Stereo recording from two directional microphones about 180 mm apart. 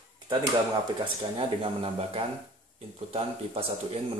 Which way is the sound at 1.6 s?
30° right (ahead or behind).